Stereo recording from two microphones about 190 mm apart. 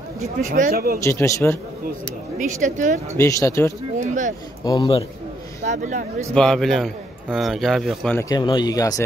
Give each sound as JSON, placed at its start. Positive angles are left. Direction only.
{"t": 0.4, "sound": "speech", "side_deg": -40}
{"t": 1.0, "sound": "speech", "side_deg": 15}
{"t": 2.3, "sound": "speech", "side_deg": -40}
{"t": 3.2, "sound": "speech", "side_deg": 15}
{"t": 4.0, "sound": "speech", "side_deg": -40}
{"t": 4.6, "sound": "speech", "side_deg": 20}
{"t": 5.6, "sound": "speech", "side_deg": -40}
{"t": 6.3, "sound": "a man's voice", "side_deg": 5}
{"t": 8.3, "sound": "speech", "side_deg": 25}